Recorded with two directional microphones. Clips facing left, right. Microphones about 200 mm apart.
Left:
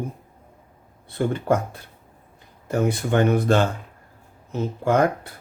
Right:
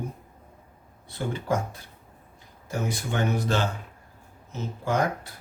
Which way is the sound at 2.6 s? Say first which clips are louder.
Left 8 dB; 55° left (ahead or behind).